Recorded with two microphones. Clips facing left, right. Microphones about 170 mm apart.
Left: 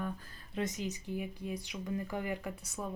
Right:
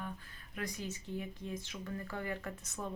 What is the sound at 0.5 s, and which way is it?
Speech, 20° left (ahead or behind).